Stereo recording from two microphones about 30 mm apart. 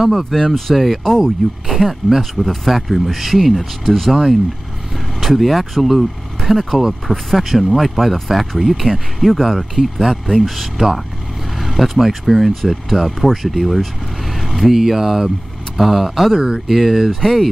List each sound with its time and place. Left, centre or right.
0.0 s speech: centre
0.3 s speech: centre
1.2 s speech: centre
14.4 s vehicle: centre
14.8 s speech: centre
16.3 s speech: centre
16.6 s speech: centre
17.2 s speech: centre